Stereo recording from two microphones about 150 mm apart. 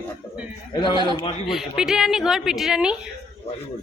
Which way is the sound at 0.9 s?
30° right (ahead or behind).